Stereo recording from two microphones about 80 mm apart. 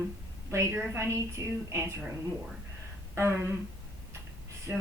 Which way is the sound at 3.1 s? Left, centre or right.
Right.